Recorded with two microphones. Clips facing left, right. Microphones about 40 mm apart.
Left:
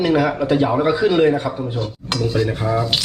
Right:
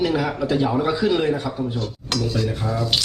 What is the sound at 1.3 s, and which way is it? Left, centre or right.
A man's voice, left.